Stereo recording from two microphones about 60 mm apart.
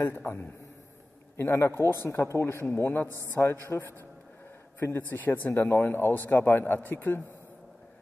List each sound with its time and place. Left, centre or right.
0.2 s speech: left
1.3 s speech: left
2.0 s speech: left
2.7 s speech: left
4.8 s speech: left
5.2 s speech: left